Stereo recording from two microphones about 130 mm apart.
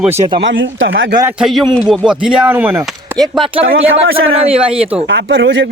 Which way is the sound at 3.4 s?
45° right (ahead or behind).